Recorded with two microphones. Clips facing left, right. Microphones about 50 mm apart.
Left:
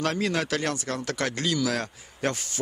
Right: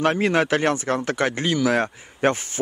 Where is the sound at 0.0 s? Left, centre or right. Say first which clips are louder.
Right 7 dB; right.